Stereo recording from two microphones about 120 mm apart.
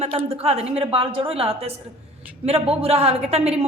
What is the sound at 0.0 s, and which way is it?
A woman's voice, 55° right (ahead or behind).